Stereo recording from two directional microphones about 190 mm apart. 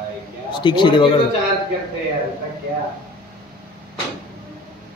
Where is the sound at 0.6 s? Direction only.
25° left (ahead or behind).